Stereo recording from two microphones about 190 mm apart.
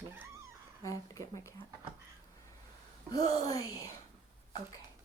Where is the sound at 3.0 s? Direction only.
20° left (ahead or behind).